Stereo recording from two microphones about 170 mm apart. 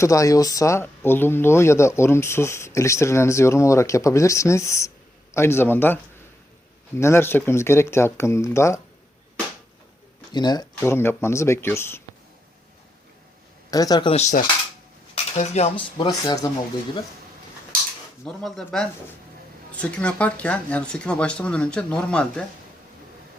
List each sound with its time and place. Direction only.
0.0 s speech: 20° left (ahead or behind)
10.3 s speech: 25° left (ahead or behind)
13.7 s speech: 20° left (ahead or behind)
14.1 s cutlery: 40° left (ahead or behind); by 16.5 s 20° left (ahead or behind)
18.3 s speech: centre (ahead or behind)